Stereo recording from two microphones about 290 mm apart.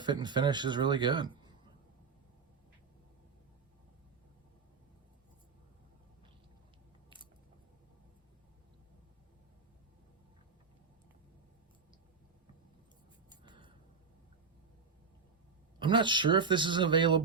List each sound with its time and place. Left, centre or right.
0.0 s a man's voice: centre
13.3 s a sound: centre
15.8 s a man's voice: centre